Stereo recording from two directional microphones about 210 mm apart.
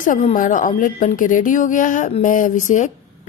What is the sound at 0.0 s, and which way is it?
Speech, 40° left (ahead or behind).